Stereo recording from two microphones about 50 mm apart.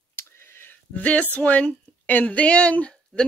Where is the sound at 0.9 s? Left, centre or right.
Left.